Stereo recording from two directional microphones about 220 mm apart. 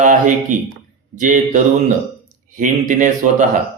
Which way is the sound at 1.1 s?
35° right (ahead or behind).